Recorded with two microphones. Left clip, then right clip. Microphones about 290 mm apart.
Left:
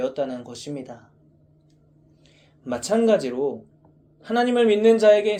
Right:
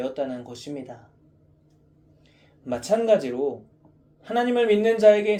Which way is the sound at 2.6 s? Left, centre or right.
Left.